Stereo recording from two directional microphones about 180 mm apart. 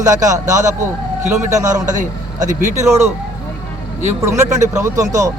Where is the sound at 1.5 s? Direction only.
15° right (ahead or behind).